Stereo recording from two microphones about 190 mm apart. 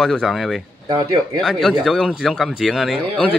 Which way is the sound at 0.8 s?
20° right (ahead or behind).